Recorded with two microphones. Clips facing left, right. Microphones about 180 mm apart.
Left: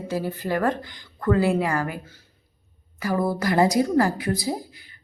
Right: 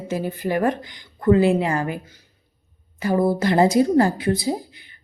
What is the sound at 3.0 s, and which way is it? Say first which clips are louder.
A woman's voice: right 4 dB; 25° right (ahead or behind).